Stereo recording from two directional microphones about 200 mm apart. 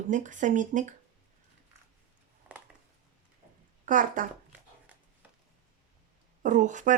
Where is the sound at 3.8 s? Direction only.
40° right (ahead or behind).